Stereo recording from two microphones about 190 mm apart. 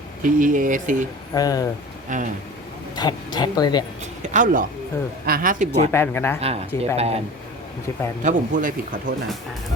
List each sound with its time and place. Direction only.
0.2 s speech: 45° right (ahead or behind)
1.3 s speech: 20° left (ahead or behind)
2.1 s speech: 40° right (ahead or behind)
2.9 s speech: 20° left (ahead or behind)
4.2 s speech: 40° right (ahead or behind)
5.9 s speech: 10° left (ahead or behind)
6.4 s speech: 35° right (ahead or behind)
8.2 s speech: 40° right (ahead or behind)